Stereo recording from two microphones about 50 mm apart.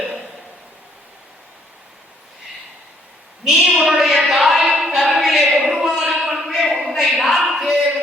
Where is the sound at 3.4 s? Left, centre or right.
Centre.